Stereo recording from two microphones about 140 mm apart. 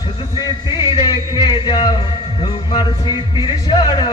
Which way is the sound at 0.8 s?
30° left (ahead or behind).